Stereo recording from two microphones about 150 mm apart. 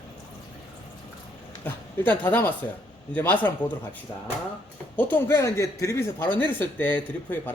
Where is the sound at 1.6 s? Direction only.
15° left (ahead or behind).